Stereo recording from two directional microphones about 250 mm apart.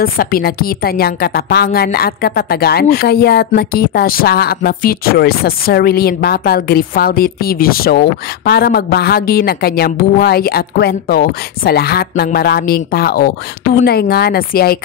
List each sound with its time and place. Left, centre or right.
0.0 s a woman's voice: left